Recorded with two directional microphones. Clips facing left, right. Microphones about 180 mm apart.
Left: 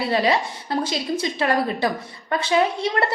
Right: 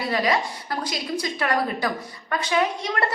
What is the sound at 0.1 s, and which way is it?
A woman's voice, 25° left (ahead or behind).